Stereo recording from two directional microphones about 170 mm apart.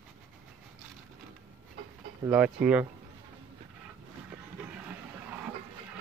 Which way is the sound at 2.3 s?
10° right (ahead or behind).